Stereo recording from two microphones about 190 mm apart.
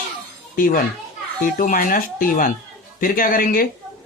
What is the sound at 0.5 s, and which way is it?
A child's voice, 50° left (ahead or behind).